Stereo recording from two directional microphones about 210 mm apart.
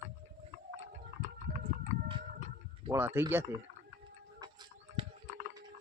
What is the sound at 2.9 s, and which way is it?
Speech, 10° right (ahead or behind).